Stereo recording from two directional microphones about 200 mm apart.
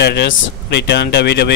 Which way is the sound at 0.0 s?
55° left (ahead or behind).